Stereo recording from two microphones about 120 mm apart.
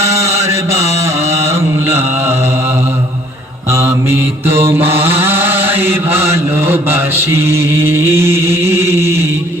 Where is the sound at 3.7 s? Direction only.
20° right (ahead or behind).